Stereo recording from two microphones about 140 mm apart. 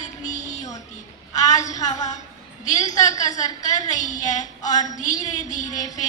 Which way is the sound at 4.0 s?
60° left (ahead or behind).